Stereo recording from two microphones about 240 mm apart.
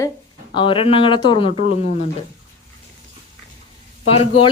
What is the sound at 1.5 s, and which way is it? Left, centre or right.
Speech, right.